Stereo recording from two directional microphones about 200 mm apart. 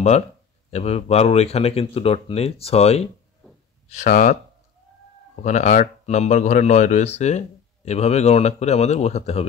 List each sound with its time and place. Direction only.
0.7 s speech: 35° left (ahead or behind)